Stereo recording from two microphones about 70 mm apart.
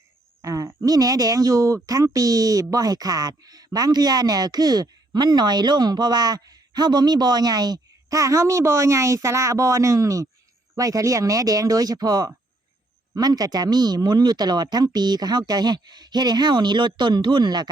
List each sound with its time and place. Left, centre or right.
0.4 s speech: right
8.2 s speech: right